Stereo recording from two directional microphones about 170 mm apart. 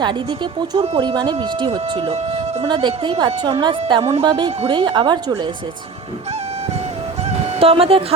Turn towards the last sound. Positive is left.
turn(degrees=-35)  # may be behind; listen again after turning